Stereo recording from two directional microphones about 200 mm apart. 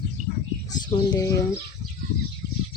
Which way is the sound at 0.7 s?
20° left (ahead or behind).